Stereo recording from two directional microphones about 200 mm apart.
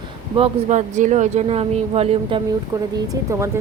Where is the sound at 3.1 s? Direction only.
15° right (ahead or behind).